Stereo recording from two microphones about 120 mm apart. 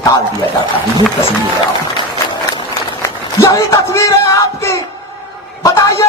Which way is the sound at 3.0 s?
25° left (ahead or behind).